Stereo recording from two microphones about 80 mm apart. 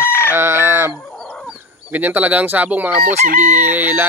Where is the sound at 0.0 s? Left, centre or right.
Left.